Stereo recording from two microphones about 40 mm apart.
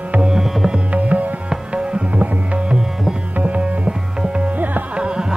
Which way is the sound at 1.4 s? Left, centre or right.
Right.